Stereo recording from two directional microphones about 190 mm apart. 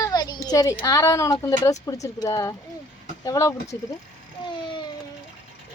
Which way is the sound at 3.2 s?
15° left (ahead or behind).